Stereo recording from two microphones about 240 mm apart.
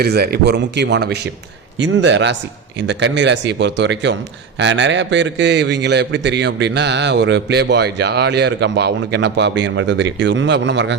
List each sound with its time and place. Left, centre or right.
0.0 s a man's voice: right